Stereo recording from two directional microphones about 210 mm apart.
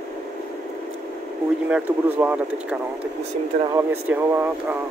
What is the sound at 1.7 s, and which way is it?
Speech, 10° right (ahead or behind).